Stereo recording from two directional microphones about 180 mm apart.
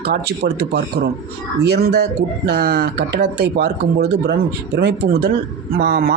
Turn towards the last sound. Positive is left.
turn(degrees=-60)  # may be behind; listen again after turning